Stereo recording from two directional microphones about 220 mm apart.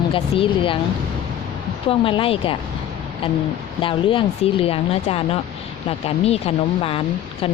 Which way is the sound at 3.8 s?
25° left (ahead or behind).